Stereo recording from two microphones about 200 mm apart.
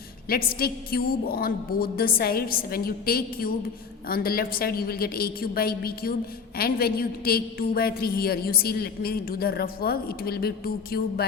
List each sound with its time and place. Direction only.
0.3 s a woman's voice: 45° left (ahead or behind)